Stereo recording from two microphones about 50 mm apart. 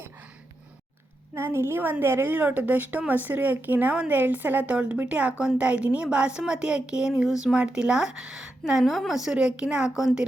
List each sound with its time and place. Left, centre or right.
1.4 s a woman's voice: right
1.8 s a woman's voice: right
2.0 s a woman's voice: right
2.3 s a woman's voice: right; by 10.2 s centre